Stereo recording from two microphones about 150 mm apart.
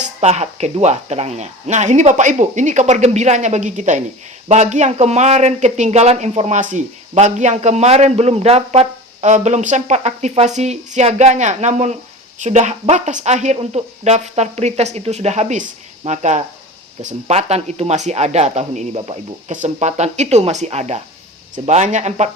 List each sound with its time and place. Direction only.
0.0 s a man's voice: 50° right (ahead or behind)